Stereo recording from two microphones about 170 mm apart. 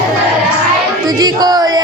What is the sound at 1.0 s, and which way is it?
Music, 25° right (ahead or behind).